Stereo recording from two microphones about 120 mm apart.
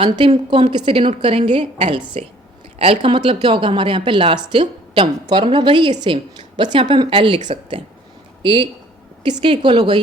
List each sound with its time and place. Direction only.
0.0 s a woman's voice: 50° right (ahead or behind)